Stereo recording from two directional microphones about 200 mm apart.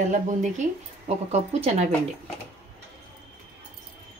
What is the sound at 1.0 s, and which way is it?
Speech, 30° right (ahead or behind).